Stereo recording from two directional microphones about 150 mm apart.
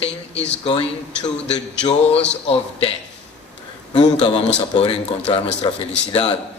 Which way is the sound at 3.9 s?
30° left (ahead or behind).